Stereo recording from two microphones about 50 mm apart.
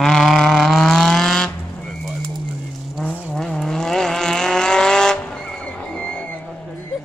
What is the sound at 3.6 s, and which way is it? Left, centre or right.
Vehicle, centre.